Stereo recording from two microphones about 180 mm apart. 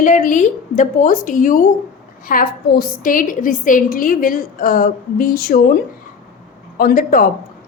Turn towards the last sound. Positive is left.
turn(degrees=50)  # may be behind; listen again after turning